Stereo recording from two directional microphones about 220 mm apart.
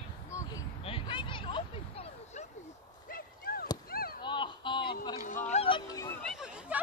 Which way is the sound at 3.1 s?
40° left (ahead or behind).